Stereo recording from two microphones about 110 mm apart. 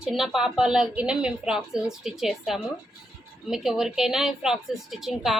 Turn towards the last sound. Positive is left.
turn(degrees=0)  # may be behind; listen again after turning